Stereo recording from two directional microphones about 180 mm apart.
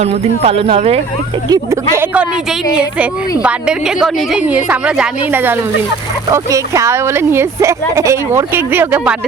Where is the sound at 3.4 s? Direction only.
5° right (ahead or behind).